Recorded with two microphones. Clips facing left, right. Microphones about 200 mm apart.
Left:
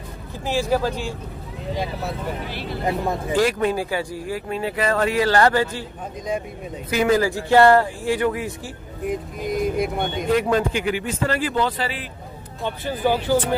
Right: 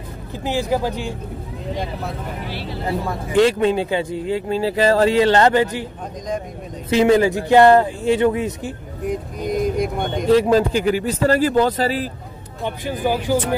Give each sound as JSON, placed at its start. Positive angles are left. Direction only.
{"t": 0.4, "sound": "speech", "side_deg": -15}
{"t": 2.9, "sound": "speech", "side_deg": 20}
{"t": 3.3, "sound": "speech", "side_deg": -25}
{"t": 6.9, "sound": "speech", "side_deg": -25}
{"t": 9.1, "sound": "a sound", "side_deg": 0}
{"t": 10.3, "sound": "a man's voice", "side_deg": -35}
{"t": 12.6, "sound": "speech", "side_deg": -15}